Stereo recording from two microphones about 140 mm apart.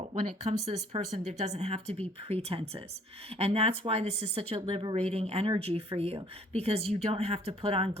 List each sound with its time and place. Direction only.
0.1 s speech: 50° right (ahead or behind)
4.9 s speech: 45° right (ahead or behind)